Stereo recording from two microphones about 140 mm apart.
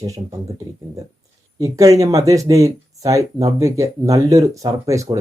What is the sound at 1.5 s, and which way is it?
Speech, 25° right (ahead or behind).